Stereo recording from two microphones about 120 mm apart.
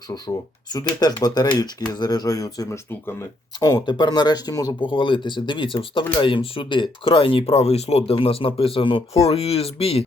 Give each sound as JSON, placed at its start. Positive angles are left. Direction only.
{"t": 0.9, "sound": "speech", "side_deg": 35}